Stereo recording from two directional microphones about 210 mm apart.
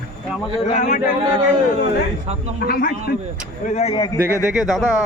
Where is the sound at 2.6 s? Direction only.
45° left (ahead or behind).